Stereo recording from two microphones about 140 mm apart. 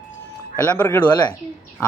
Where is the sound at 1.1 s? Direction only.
30° left (ahead or behind).